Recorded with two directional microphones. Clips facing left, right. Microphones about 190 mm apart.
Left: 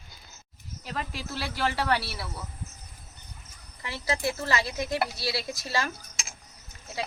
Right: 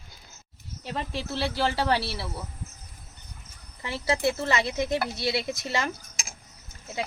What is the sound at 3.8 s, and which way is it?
Speech, 25° right (ahead or behind).